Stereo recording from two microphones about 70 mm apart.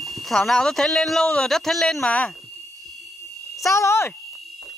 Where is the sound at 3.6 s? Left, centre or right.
Left.